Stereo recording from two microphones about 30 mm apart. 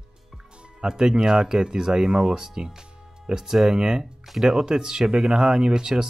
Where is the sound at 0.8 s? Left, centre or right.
Right.